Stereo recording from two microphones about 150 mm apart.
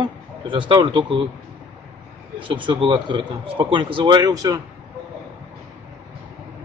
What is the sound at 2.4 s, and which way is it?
A man's voice, 35° right (ahead or behind).